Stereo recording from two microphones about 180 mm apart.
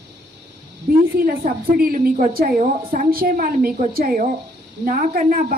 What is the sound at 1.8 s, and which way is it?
A woman's voice, 55° right (ahead or behind).